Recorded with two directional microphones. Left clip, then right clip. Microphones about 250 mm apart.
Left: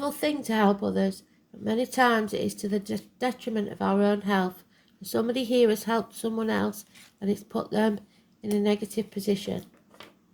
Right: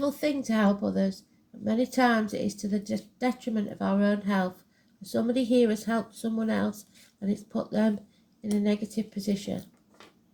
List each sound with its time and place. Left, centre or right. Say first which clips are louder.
0.0 s speech: even; left